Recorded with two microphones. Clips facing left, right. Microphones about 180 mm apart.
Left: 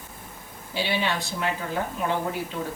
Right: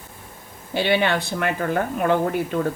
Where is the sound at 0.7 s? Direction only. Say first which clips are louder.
Right 7 dB; 60° right (ahead or behind).